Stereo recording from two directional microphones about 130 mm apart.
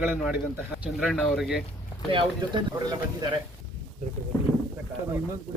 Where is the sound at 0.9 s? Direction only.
Centre (ahead or behind).